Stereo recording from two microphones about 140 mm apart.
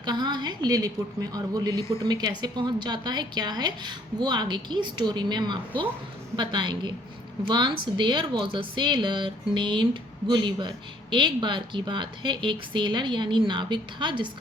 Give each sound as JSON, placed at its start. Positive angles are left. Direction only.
{"t": 0.0, "sound": "speech", "side_deg": -30}